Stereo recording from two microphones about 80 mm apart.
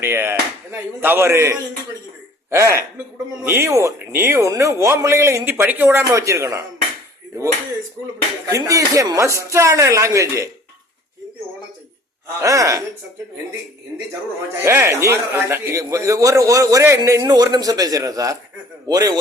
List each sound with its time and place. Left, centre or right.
0.0 s speech: right
3.7 s speech: right
4.1 s speech: right
4.4 s speech: right
5.5 s speech: right
6.1 s speech: right
8.4 s speech: right
12.4 s a man's voice: right
14.5 s speech: right
15.8 s a man's voice: right